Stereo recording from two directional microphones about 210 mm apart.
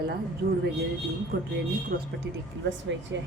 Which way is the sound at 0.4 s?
45° right (ahead or behind).